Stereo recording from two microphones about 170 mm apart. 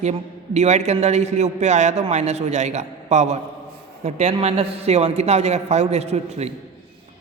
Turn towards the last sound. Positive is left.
turn(degrees=-40)  # may be behind; listen again after turning